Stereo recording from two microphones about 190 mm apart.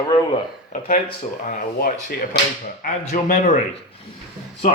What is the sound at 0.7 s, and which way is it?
Speech, 40° left (ahead or behind).